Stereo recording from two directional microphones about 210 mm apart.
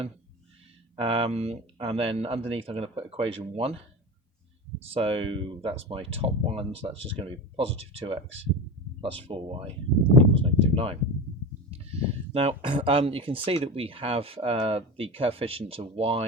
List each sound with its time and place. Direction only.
0.9 s speech: 25° right (ahead or behind)
4.9 s speech: 25° right (ahead or behind)
9.2 s speech: 25° right (ahead or behind)